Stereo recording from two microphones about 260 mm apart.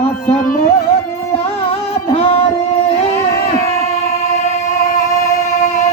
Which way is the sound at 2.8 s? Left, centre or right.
Left.